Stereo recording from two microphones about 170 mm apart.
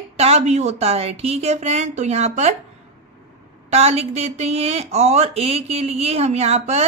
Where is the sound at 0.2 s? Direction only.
40° right (ahead or behind).